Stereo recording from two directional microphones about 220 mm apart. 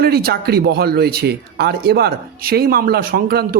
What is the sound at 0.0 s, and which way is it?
Speech, 45° right (ahead or behind).